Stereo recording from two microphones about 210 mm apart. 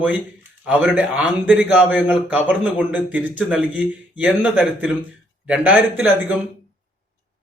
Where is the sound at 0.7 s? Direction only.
5° right (ahead or behind).